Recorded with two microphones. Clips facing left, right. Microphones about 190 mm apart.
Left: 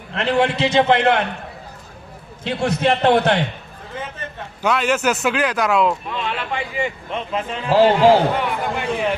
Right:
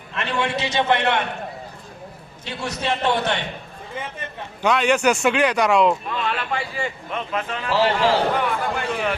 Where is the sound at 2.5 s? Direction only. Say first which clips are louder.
Left 7 dB; 55° left (ahead or behind).